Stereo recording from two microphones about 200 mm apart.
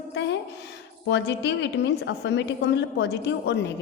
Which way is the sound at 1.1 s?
60° left (ahead or behind).